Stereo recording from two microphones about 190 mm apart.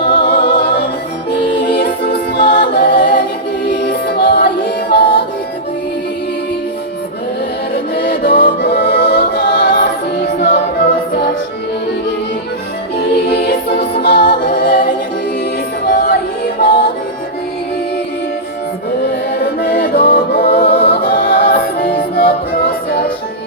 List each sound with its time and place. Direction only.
0.0 s music: 60° left (ahead or behind)
2.6 s a capella: 60° left (ahead or behind)
3.7 s music: 60° left (ahead or behind)
7.9 s music: 65° left (ahead or behind)
13.0 s music: 60° left (ahead or behind)
14.4 s a capella: 60° left (ahead or behind)
15.9 s music: 55° left (ahead or behind)
19.4 s music: 60° left (ahead or behind)
20.7 s music: 30° left (ahead or behind)
21.0 s music: 55° left (ahead or behind)